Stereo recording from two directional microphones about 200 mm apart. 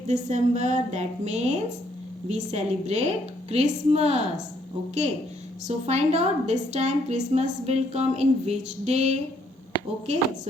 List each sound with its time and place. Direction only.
0.1 s a woman's voice: 35° right (ahead or behind)
5.6 s a woman's voice: 30° right (ahead or behind)